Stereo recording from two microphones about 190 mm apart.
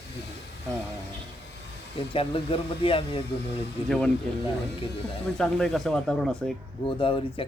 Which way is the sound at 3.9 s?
5° left (ahead or behind).